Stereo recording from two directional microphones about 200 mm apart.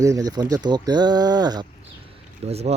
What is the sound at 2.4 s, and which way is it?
Speech, 30° right (ahead or behind).